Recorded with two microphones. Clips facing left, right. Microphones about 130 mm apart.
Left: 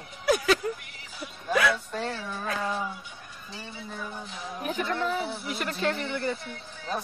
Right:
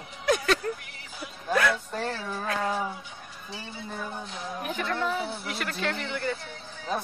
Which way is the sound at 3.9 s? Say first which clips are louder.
Right 3 dB; centre (ahead or behind).